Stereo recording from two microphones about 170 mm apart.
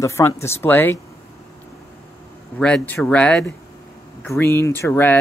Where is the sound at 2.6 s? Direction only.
5° left (ahead or behind).